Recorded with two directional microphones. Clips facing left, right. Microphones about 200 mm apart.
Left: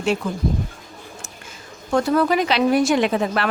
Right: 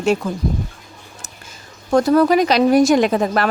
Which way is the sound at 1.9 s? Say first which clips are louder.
Right 5 dB; 40° right (ahead or behind).